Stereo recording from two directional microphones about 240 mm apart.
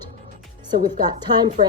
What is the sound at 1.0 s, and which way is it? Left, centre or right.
Speech, centre.